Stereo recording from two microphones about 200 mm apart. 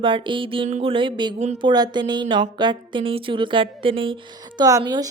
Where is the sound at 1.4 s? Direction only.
35° right (ahead or behind).